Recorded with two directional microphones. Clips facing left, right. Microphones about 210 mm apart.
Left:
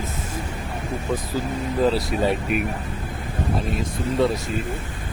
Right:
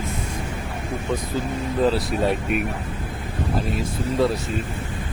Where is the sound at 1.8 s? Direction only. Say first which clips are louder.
Even; centre (ahead or behind).